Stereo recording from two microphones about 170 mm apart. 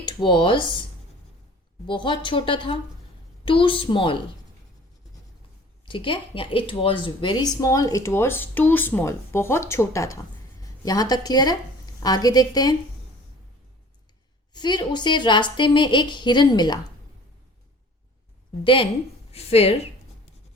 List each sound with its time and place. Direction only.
0.0 s speech: 25° left (ahead or behind)
1.9 s a woman's voice: 30° left (ahead or behind)
5.8 s a woman's voice: 30° left (ahead or behind)
14.5 s speech: 25° left (ahead or behind)
18.6 s a woman's voice: 30° left (ahead or behind)